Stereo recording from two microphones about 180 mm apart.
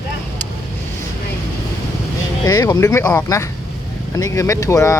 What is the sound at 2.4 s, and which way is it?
Speech, 20° left (ahead or behind).